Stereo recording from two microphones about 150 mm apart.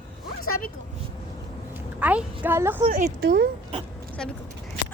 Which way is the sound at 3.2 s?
90° right.